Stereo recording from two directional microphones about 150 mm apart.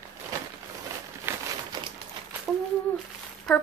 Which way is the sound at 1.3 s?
15° right (ahead or behind).